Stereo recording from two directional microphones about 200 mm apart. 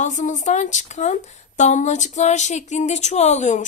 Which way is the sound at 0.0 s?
35° left (ahead or behind).